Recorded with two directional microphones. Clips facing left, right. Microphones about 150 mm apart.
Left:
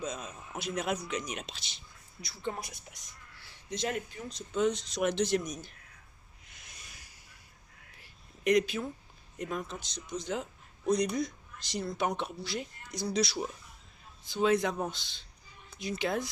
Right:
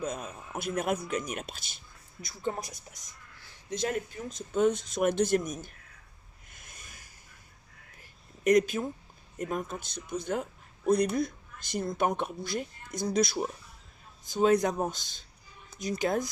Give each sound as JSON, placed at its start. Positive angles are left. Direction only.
{"t": 0.0, "sound": "speech", "side_deg": -55}
{"t": 4.3, "sound": "speech", "side_deg": -50}
{"t": 6.5, "sound": "a sound", "side_deg": -50}
{"t": 8.4, "sound": "speech", "side_deg": -45}